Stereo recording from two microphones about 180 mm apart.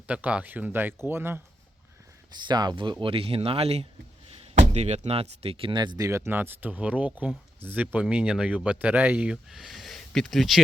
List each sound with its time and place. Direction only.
0.1 s speech: 5° right (ahead or behind)
2.4 s speech: 25° right (ahead or behind); by 10.6 s centre (ahead or behind)